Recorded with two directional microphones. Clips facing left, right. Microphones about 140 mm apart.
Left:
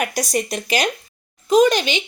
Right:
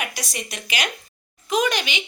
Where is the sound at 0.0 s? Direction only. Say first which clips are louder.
Left 9 dB; 45° left (ahead or behind).